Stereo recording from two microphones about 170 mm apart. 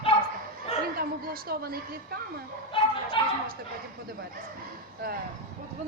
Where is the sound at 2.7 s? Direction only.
30° left (ahead or behind).